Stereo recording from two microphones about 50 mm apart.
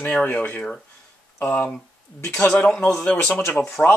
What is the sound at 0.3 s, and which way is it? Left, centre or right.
Speech, left.